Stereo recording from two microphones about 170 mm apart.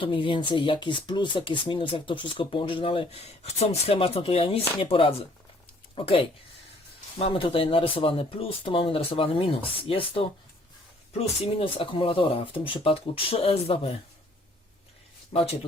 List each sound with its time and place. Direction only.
0.0 s speech: 30° left (ahead or behind)
11.5 s speech: 30° left (ahead or behind)
15.3 s speech: 35° left (ahead or behind)